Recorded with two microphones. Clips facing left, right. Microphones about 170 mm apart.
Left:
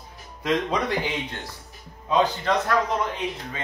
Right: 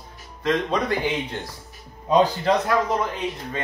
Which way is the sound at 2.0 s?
40° right (ahead or behind).